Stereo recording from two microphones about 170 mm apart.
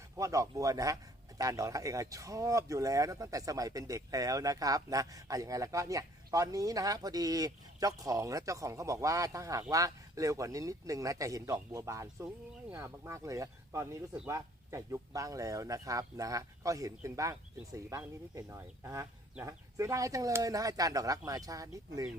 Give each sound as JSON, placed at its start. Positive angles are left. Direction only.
{"t": 0.2, "sound": "speech", "side_deg": -20}